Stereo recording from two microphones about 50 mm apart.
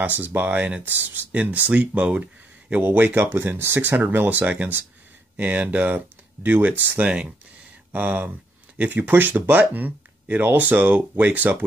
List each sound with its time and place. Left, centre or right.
0.0 s speech: right
3.2 s speech: right
7.9 s speech: right